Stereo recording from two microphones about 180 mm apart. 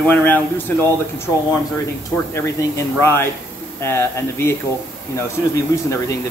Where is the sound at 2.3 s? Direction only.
15° left (ahead or behind).